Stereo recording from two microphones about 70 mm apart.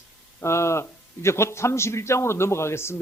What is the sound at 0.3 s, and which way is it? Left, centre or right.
A man's voice, left.